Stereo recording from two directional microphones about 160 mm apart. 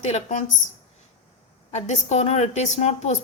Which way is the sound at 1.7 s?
45° left (ahead or behind).